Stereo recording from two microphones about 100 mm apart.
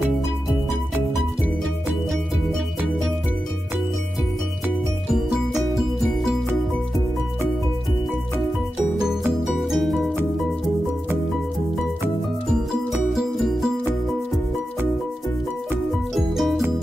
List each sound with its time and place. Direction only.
5.1 s music: 5° right (ahead or behind)
9.4 s music: centre (ahead or behind)
13.1 s music: centre (ahead or behind)
16.2 s music: centre (ahead or behind)